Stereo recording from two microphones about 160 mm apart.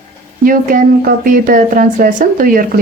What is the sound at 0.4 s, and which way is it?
Speech, 60° right (ahead or behind).